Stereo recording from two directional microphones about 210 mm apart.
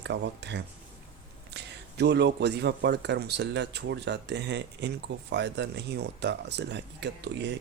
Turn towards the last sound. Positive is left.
turn(degrees=-55)  # may be behind; listen again after turning